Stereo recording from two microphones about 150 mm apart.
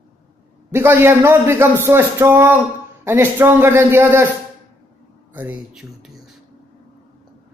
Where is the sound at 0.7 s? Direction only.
15° right (ahead or behind).